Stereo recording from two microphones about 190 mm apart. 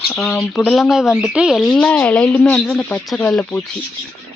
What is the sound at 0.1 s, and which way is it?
Speech, 5° left (ahead or behind).